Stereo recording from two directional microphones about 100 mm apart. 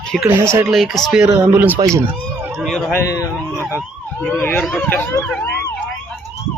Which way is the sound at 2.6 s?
5° left (ahead or behind).